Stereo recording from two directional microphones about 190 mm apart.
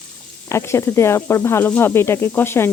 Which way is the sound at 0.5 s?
15° left (ahead or behind).